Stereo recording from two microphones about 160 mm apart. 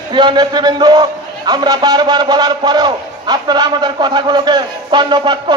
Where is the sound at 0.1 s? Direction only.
30° right (ahead or behind).